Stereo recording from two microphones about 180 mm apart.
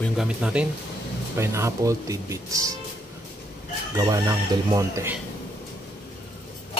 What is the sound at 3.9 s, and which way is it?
Speech, 20° right (ahead or behind).